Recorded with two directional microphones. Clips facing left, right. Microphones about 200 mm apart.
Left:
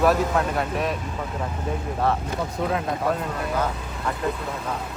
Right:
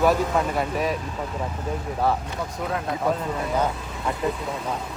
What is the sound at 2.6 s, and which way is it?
Speech, 30° left (ahead or behind).